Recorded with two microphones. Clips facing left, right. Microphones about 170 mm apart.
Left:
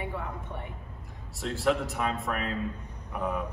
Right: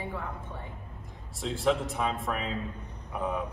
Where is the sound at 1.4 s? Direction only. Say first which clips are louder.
Even; centre (ahead or behind).